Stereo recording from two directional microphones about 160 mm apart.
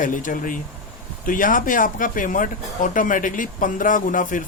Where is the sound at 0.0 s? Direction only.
55° left (ahead or behind).